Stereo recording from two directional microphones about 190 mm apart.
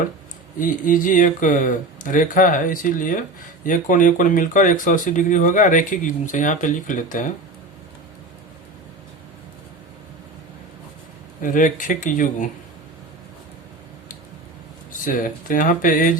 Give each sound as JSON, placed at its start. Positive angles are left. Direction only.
{"t": 0.6, "sound": "speech", "side_deg": 45}
{"t": 11.4, "sound": "speech", "side_deg": 45}
{"t": 15.0, "sound": "speech", "side_deg": 45}